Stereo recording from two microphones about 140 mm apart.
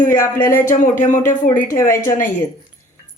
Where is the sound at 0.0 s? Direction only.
75° left (ahead or behind).